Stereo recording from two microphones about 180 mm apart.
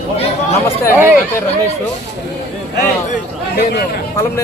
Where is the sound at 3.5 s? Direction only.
60° left (ahead or behind).